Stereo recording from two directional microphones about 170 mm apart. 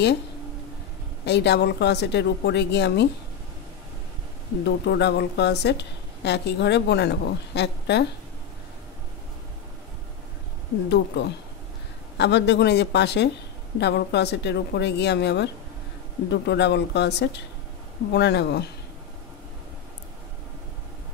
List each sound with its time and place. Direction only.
1.2 s a woman's voice: 80° left
4.6 s a woman's voice: 80° left
10.9 s a woman's voice: 90° left